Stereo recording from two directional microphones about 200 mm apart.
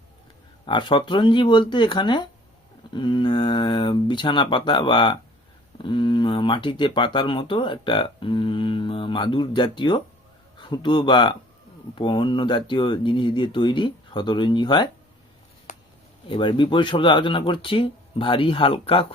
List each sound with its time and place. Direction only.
0.6 s speech: 25° left (ahead or behind)
15.7 s a sound: 40° left (ahead or behind)
16.3 s speech: 25° left (ahead or behind)